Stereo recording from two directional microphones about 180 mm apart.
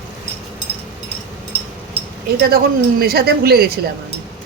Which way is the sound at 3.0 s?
60° right (ahead or behind).